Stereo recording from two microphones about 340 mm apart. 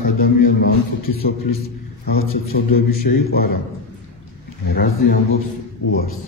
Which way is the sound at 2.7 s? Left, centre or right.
Left.